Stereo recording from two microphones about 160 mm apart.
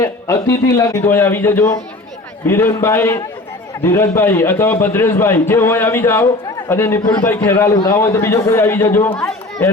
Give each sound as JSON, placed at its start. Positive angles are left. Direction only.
{"t": 0.0, "sound": "a man's voice", "side_deg": 20}